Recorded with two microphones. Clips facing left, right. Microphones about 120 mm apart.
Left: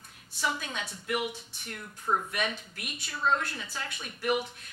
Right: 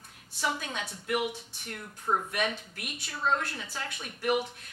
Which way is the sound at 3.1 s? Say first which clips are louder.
Left 1 dB; 40° right (ahead or behind).